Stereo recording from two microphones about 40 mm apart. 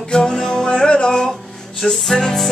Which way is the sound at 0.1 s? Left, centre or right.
Centre.